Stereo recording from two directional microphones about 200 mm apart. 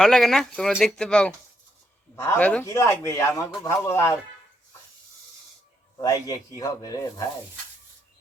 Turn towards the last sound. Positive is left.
turn(degrees=15)  # may be behind; listen again after turning